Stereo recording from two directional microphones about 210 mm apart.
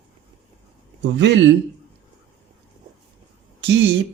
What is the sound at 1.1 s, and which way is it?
Speech, 55° right (ahead or behind).